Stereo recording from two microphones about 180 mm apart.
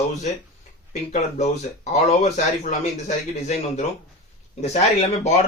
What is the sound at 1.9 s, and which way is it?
Speech, 40° left (ahead or behind).